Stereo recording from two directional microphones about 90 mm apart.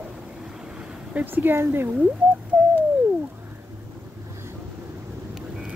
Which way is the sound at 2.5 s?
25° right (ahead or behind).